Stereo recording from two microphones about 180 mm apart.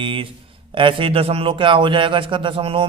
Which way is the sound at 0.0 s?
30° right (ahead or behind).